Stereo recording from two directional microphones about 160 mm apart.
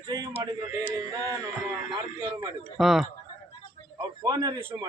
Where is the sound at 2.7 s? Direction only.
5° right (ahead or behind).